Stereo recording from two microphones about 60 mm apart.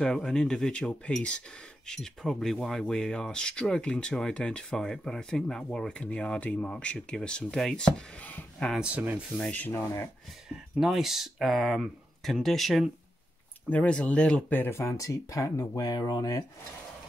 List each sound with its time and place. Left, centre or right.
0.0 s speech: centre
1.9 s speech: centre
8.2 s speech: left
8.8 s speech: right
9.4 s speech: left
10.8 s speech: centre
13.7 s speech: centre
14.5 s speech: left
14.8 s speech: left